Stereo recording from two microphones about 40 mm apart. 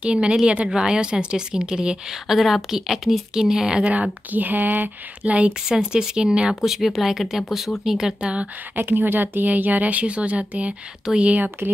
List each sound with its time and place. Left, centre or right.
0.0 s speech: right
2.2 s speech: centre
4.3 s speech: right
5.7 s speech: centre
6.6 s speech: centre
8.2 s speech: right
8.7 s speech: right